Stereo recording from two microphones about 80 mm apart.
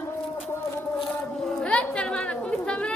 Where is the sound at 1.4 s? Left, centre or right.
Centre.